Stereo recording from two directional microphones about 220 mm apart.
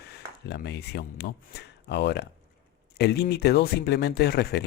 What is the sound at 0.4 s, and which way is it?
Speech, 50° left (ahead or behind).